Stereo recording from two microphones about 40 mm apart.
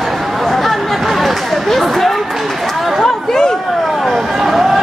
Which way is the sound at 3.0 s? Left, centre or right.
Centre.